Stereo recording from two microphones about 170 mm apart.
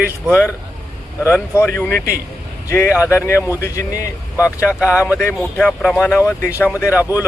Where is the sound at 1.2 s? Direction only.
15° left (ahead or behind).